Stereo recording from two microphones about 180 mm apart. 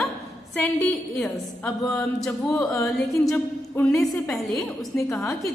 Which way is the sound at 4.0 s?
Centre (ahead or behind).